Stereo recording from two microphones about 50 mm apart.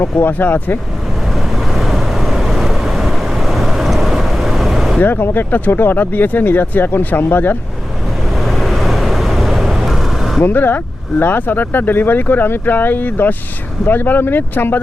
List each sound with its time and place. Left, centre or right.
0.0 s speech: left
1.5 s vehicle: centre
4.9 s speech: left
8.4 s vehicle: centre
10.4 s speech: left